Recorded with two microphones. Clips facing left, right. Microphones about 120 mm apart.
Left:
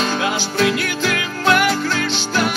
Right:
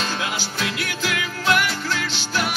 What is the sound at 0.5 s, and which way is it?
Music, 60° left (ahead or behind).